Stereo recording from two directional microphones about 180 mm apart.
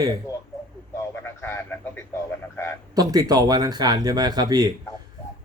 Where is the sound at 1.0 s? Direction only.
15° left (ahead or behind).